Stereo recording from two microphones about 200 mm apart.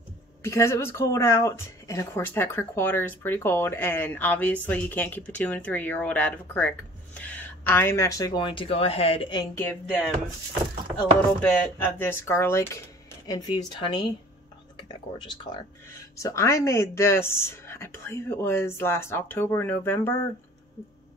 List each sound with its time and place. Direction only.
0.4 s speech: 15° left (ahead or behind)
11.4 s speech: 10° left (ahead or behind)